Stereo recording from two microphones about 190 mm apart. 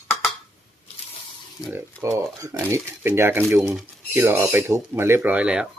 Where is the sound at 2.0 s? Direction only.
15° right (ahead or behind).